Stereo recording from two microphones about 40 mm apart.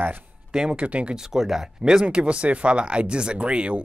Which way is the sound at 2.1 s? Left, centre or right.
Right.